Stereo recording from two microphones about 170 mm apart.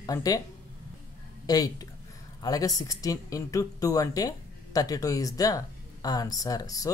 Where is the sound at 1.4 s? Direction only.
20° left (ahead or behind).